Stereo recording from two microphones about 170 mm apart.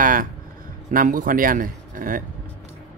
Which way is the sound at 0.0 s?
55° right (ahead or behind).